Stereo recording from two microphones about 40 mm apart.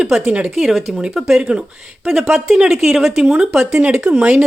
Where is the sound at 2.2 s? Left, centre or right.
Centre.